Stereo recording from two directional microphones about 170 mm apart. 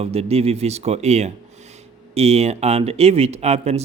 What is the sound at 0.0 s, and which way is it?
Speech, 35° right (ahead or behind).